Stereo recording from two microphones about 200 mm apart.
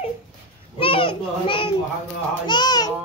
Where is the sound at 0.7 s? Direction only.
25° left (ahead or behind).